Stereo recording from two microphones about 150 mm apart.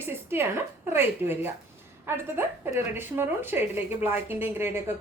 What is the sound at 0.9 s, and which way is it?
Speech, 15° right (ahead or behind).